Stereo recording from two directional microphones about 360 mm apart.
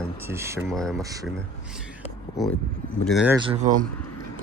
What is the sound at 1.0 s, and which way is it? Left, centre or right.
Speech, centre.